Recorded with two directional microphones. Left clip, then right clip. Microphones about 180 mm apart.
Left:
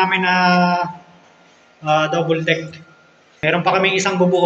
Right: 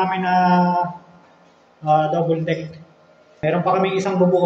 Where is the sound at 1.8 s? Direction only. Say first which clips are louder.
Left 1 dB; 10° right (ahead or behind).